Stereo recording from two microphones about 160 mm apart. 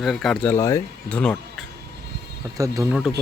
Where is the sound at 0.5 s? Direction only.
20° left (ahead or behind).